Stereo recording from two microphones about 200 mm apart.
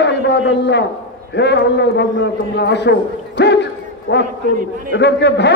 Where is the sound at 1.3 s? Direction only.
60° left (ahead or behind).